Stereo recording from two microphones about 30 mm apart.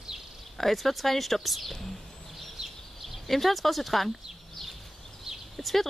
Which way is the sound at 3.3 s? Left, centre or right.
Centre.